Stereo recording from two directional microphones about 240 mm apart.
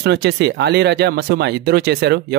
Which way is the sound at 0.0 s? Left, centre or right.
Right.